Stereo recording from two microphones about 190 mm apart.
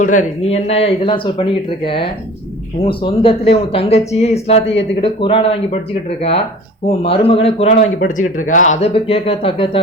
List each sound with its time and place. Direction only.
0.0 s a man's voice: 40° left (ahead or behind)